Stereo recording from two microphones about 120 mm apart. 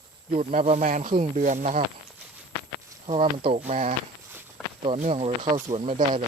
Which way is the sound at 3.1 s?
60° right (ahead or behind).